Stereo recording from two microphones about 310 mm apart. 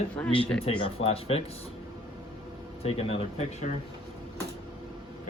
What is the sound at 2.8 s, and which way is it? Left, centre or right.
Speech, centre.